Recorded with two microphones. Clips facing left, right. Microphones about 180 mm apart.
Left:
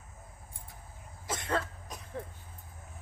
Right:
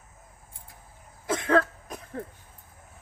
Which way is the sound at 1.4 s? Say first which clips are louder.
Right 11 dB; 60° right (ahead or behind).